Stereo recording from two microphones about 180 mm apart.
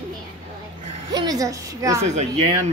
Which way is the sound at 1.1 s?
20° right (ahead or behind).